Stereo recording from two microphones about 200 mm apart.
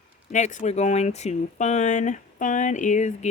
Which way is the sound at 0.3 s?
35° left (ahead or behind).